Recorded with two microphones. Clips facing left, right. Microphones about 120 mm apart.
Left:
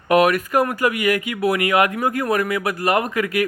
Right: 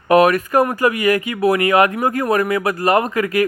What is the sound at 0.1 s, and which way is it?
Speech, 40° right (ahead or behind).